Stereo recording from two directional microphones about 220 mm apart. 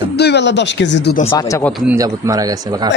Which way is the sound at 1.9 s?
15° right (ahead or behind).